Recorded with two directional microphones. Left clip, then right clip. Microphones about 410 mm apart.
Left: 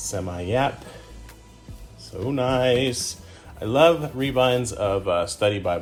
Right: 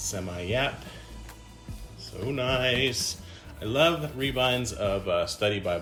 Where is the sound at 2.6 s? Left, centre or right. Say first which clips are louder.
Left 7 dB; left.